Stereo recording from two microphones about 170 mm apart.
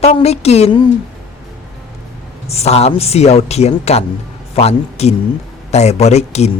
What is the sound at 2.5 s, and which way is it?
A woman's voice, 40° left (ahead or behind).